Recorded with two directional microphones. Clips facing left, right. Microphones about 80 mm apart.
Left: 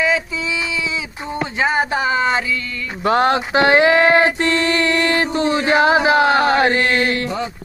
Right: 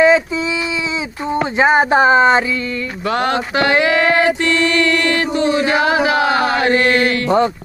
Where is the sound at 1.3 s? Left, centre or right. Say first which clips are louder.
Right 6 dB; right.